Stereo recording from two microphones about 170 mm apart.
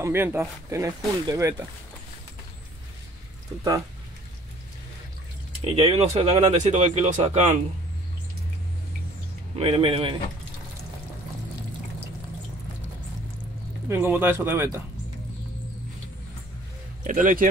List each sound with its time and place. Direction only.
0.0 s speech: 15° right (ahead or behind)
5.6 s speech: 35° right (ahead or behind)
9.6 s speech: 35° right (ahead or behind)
13.8 s speech: 10° right (ahead or behind)
17.0 s speech: 50° right (ahead or behind)